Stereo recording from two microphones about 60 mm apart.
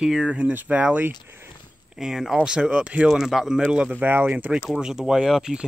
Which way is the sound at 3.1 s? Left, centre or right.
Centre.